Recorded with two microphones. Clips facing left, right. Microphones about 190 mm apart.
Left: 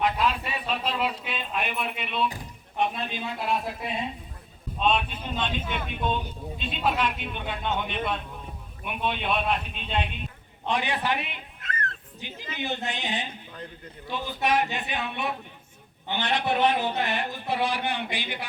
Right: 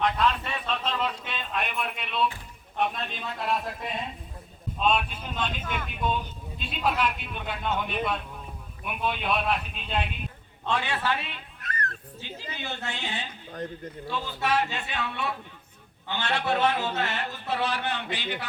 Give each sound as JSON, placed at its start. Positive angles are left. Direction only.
{"t": 0.0, "sound": "a sound", "side_deg": 5}
{"t": 2.7, "sound": "speech", "side_deg": 0}
{"t": 10.7, "sound": "a woman's voice", "side_deg": 15}